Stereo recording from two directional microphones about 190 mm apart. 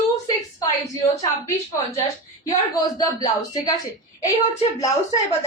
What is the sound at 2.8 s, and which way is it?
Speech, 20° left (ahead or behind).